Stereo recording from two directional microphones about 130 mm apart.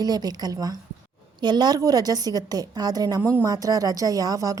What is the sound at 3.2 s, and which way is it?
Speech, 15° right (ahead or behind).